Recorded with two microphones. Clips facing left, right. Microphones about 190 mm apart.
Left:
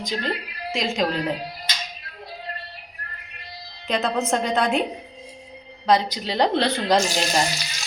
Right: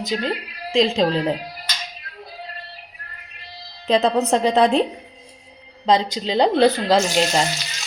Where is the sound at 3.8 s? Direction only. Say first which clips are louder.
Right 6 dB; 35° right (ahead or behind).